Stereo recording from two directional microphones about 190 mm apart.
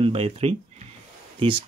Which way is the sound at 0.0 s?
30° right (ahead or behind).